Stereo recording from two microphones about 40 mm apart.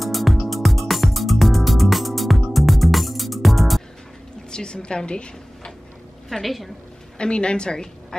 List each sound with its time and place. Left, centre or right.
0.0 s music: centre
4.5 s a woman's voice: left
6.2 s a woman's voice: centre
7.2 s a woman's voice: left